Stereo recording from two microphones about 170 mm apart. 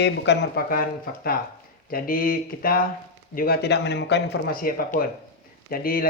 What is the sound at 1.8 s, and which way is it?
Speech, 55° left (ahead or behind).